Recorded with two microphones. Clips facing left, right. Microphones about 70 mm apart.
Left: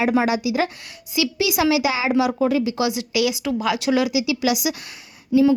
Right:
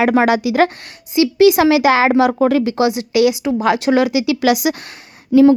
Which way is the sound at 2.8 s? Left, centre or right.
Right.